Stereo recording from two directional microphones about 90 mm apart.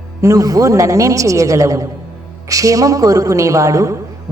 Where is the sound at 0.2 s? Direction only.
35° right (ahead or behind).